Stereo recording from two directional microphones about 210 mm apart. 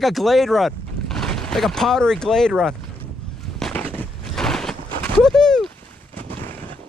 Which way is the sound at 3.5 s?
Centre (ahead or behind).